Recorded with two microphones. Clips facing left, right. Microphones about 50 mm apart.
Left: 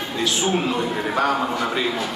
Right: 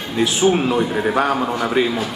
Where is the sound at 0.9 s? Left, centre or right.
Centre.